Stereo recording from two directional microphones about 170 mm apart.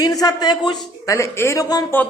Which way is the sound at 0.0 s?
20° left (ahead or behind).